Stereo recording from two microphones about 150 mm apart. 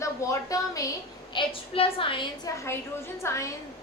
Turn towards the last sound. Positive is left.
turn(degrees=20)  # may be behind; listen again after turning